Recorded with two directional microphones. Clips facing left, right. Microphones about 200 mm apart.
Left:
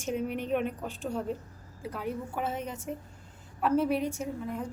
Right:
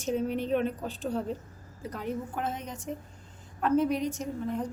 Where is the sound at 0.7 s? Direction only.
35° right (ahead or behind).